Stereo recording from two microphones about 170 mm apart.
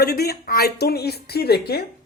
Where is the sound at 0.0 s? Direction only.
65° left (ahead or behind).